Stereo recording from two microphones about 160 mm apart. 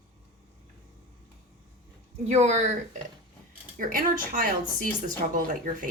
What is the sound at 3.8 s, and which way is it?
A woman's voice, 60° right (ahead or behind).